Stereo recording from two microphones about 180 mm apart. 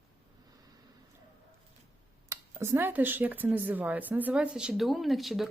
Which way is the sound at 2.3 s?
15° right (ahead or behind).